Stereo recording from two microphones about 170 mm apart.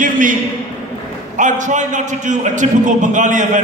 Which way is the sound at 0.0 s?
50° right (ahead or behind).